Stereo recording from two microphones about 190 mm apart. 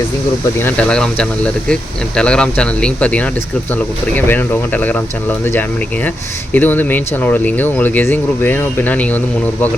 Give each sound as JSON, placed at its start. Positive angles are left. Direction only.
{"t": 0.6, "sound": "speech", "side_deg": 5}
{"t": 6.5, "sound": "speech", "side_deg": 10}